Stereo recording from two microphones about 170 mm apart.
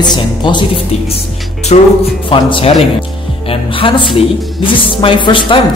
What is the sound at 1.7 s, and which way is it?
Speech, 40° left (ahead or behind).